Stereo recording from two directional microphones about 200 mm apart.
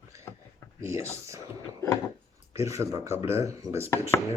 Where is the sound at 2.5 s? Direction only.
15° right (ahead or behind).